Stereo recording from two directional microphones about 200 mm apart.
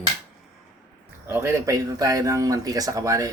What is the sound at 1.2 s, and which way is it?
Speech, 10° right (ahead or behind).